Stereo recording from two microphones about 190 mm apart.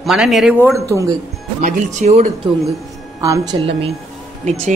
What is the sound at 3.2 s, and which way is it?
A woman's voice, 20° right (ahead or behind).